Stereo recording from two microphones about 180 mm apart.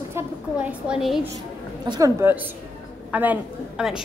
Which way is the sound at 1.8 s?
20° right (ahead or behind).